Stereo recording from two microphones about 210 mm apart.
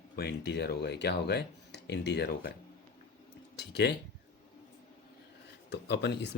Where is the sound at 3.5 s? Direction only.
55° left (ahead or behind).